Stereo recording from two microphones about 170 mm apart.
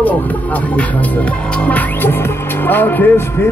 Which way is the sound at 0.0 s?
10° left (ahead or behind).